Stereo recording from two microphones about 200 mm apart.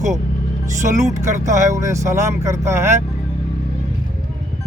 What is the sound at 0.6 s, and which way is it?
Speech, 15° right (ahead or behind).